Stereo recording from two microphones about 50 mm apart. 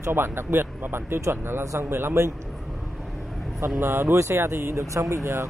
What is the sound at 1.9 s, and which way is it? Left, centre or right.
Speech, right.